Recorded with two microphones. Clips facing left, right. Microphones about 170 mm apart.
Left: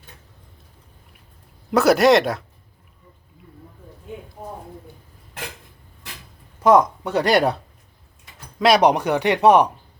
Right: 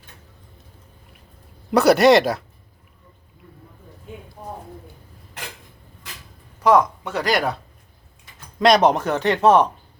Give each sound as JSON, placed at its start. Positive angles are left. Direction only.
{"t": 1.7, "sound": "speech", "side_deg": 0}
{"t": 6.6, "sound": "speech", "side_deg": 25}
{"t": 8.5, "sound": "speech", "side_deg": 5}